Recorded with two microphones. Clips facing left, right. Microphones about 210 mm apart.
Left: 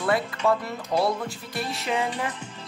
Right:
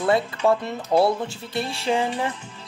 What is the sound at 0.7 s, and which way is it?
Speech, 25° right (ahead or behind).